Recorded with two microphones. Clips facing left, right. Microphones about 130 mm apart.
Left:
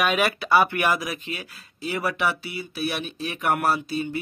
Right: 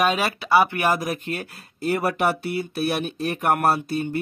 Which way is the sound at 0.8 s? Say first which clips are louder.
Right 2 dB; 45° right (ahead or behind).